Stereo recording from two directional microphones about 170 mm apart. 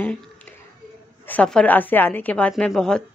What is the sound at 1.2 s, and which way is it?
A woman's voice, 10° left (ahead or behind).